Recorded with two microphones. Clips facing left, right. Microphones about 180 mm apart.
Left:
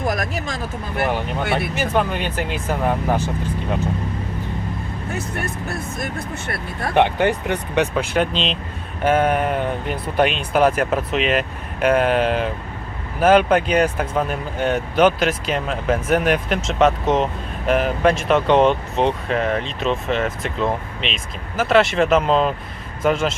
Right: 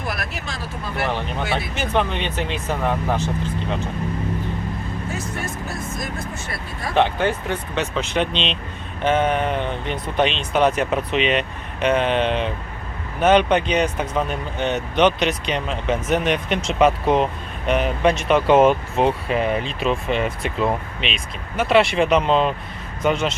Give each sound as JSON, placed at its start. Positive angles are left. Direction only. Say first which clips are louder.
{"t": 0.0, "sound": "a sound", "louder": "left 6 dB", "side_deg": 45}
{"t": 1.7, "sound": "speech", "louder": "left 2 dB", "side_deg": 5}
{"t": 5.6, "sound": "speech", "louder": "left 2 dB", "side_deg": 60}
{"t": 6.9, "sound": "speech", "louder": "left 2 dB", "side_deg": 15}